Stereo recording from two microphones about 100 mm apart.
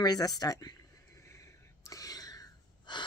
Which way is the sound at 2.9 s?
50° left (ahead or behind).